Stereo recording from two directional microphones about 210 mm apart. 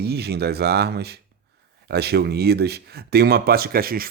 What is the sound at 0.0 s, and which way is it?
Speech, 50° right (ahead or behind).